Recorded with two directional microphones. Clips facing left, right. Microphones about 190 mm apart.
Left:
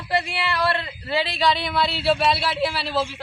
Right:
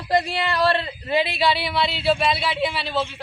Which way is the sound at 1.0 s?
15° right (ahead or behind).